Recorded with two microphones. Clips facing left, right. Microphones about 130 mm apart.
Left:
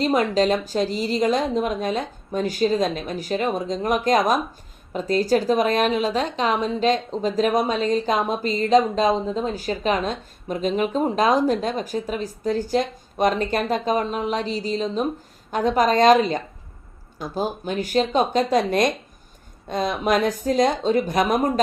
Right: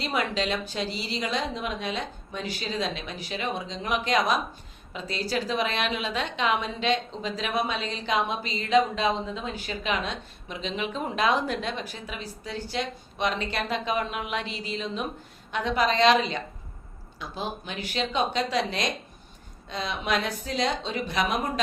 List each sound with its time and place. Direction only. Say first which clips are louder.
0.0 s a woman's voice: left 9 dB; 40° left (ahead or behind)